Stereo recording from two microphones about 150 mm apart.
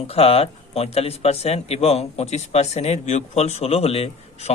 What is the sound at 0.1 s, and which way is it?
A man's voice, 40° left (ahead or behind).